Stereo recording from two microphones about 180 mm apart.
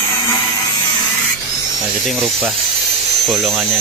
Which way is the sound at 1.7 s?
Centre (ahead or behind).